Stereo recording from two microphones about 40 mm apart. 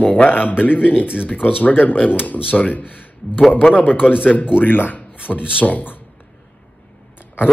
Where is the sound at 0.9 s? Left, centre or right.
Right.